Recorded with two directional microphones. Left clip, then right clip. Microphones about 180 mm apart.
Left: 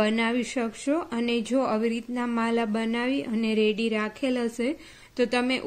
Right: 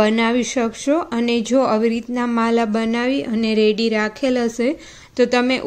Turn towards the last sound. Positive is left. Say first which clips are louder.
# right 8 dB
turn(degrees=-5)  # may be behind; listen again after turning